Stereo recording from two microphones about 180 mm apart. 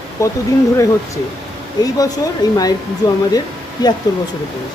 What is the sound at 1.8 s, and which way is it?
Speech, 20° left (ahead or behind).